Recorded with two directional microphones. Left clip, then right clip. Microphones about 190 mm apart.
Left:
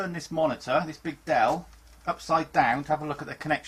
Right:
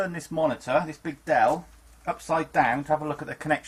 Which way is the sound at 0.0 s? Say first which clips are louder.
Right 1 dB; 20° right (ahead or behind).